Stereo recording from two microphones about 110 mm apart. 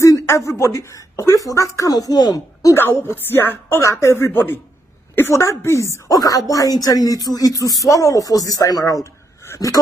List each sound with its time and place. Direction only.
0.0 s a sound: 25° left (ahead or behind)
0.5 s speech: 25° left (ahead or behind)
2.7 s a woman's voice: 20° left (ahead or behind)